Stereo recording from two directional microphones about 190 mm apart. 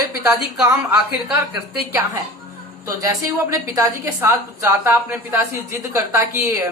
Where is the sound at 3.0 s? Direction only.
15° right (ahead or behind).